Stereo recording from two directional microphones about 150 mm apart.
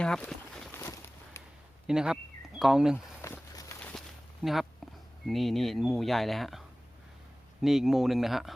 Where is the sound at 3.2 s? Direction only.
20° left (ahead or behind).